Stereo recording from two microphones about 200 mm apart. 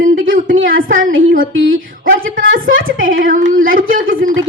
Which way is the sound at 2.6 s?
80° right.